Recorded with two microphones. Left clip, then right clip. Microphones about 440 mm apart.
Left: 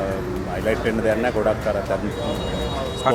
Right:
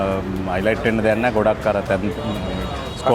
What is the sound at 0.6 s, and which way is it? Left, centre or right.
Speech, right.